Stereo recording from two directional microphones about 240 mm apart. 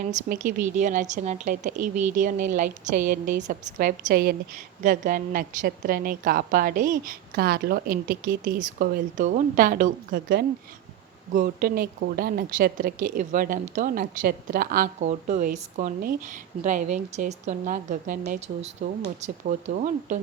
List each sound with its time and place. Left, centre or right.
0.0 s a woman's voice: right